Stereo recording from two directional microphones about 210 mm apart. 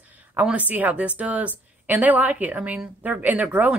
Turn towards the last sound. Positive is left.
turn(degrees=-5)  # may be behind; listen again after turning